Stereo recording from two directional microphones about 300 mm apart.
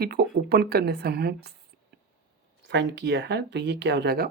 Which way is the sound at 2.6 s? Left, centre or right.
Right.